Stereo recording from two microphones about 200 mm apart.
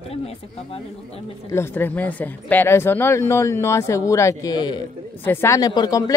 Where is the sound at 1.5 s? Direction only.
10° left (ahead or behind).